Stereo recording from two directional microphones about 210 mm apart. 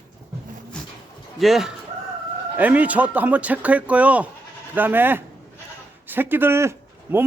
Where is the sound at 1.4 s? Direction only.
Centre (ahead or behind).